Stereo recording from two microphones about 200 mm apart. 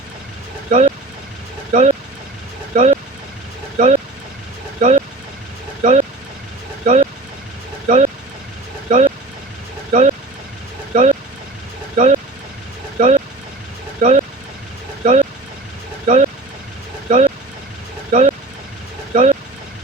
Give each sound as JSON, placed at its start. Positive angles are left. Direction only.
{"t": 0.7, "sound": "speech", "side_deg": -35}
{"t": 17.1, "sound": "vehicle", "side_deg": -35}
{"t": 18.1, "sound": "a sound", "side_deg": -35}
{"t": 19.1, "sound": "vehicle", "side_deg": -35}